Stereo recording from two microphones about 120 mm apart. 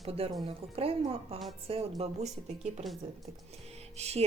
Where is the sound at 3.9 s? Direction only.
60° right (ahead or behind).